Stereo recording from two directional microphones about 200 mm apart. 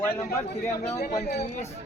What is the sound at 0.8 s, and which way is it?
Speech, 35° left (ahead or behind).